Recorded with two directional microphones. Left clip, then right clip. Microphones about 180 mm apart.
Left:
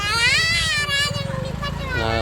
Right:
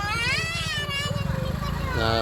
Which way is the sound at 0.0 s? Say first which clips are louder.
Left 8 dB; 35° left (ahead or behind).